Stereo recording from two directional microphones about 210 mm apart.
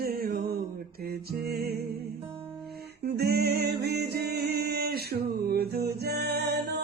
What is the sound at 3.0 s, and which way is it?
Music, 50° right (ahead or behind).